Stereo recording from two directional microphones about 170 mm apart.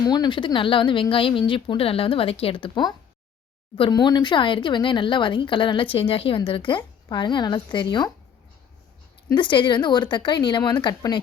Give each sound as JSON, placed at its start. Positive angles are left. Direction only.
{"t": 0.0, "sound": "speech", "side_deg": 25}
{"t": 9.3, "sound": "speech", "side_deg": 30}